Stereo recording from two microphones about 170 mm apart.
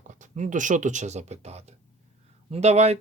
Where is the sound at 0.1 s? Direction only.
45° right (ahead or behind).